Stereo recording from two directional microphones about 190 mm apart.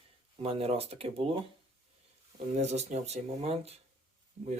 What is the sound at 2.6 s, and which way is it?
Speech, 35° right (ahead or behind).